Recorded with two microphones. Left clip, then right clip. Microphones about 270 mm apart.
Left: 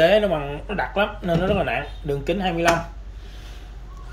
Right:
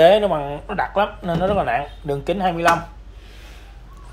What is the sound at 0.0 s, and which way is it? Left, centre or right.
Speech, centre.